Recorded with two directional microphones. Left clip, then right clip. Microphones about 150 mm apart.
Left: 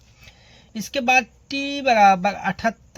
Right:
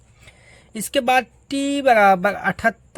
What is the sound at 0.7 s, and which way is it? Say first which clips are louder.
Speech: right 1 dB; 50° right (ahead or behind).